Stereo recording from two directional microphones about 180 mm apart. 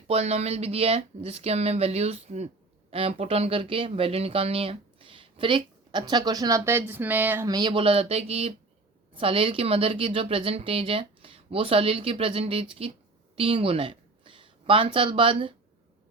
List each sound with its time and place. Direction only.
0.1 s a woman's voice: 35° right (ahead or behind)